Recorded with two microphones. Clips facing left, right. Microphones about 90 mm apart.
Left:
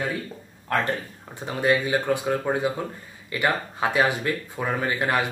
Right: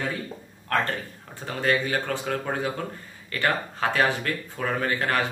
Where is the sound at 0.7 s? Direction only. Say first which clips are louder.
Left 1 dB; 15° left (ahead or behind).